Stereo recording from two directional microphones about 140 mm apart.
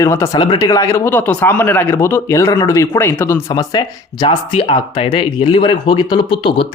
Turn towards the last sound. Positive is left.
turn(degrees=40)  # may be behind; listen again after turning